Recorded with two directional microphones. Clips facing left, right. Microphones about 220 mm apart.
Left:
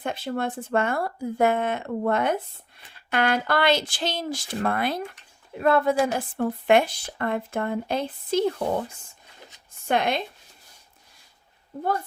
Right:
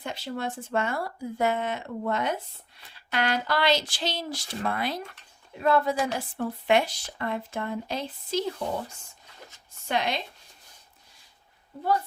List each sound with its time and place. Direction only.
0.0 s a woman's voice: 55° left (ahead or behind)
9.8 s speech: 55° left (ahead or behind)